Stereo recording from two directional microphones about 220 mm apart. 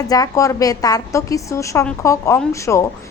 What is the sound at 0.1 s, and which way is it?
A woman's voice, 15° left (ahead or behind).